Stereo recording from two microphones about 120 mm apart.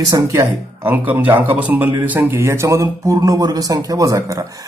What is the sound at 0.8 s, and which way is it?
Speech, 15° right (ahead or behind).